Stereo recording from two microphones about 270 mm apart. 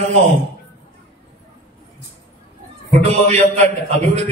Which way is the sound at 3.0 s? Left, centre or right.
Right.